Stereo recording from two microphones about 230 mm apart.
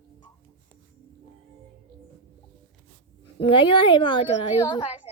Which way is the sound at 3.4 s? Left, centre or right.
Left.